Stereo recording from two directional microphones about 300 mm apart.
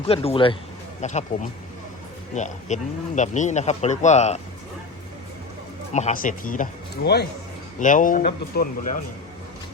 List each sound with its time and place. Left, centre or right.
0.0 s speech: centre
5.9 s speech: left